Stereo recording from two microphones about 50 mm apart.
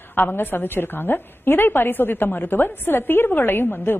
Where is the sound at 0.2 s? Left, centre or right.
Left.